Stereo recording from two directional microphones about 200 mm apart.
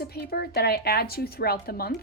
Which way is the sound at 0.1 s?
50° left (ahead or behind).